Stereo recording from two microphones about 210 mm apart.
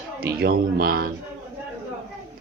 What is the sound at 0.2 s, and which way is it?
Speech, 45° right (ahead or behind).